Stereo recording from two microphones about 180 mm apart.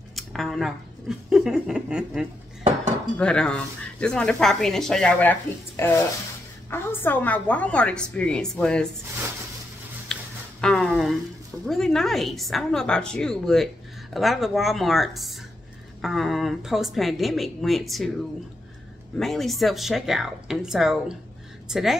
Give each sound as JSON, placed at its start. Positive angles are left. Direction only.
{"t": 0.1, "sound": "a woman's voice", "side_deg": 0}
{"t": 10.6, "sound": "speech", "side_deg": 5}
{"t": 19.1, "sound": "speech", "side_deg": 0}